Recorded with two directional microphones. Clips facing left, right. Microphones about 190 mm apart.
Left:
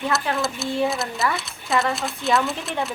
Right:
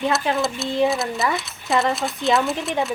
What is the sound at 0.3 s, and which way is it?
Speech, centre (ahead or behind).